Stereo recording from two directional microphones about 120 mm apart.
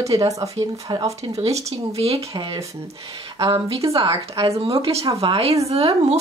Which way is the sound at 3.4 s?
45° right (ahead or behind).